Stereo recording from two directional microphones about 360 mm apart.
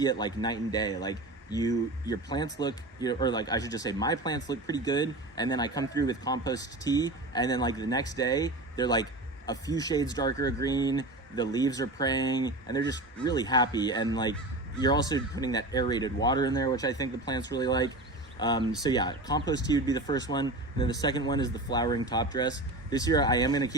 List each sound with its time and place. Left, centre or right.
0.0 s speech: centre